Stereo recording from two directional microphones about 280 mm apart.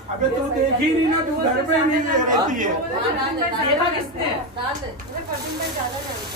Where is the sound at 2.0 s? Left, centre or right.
Right.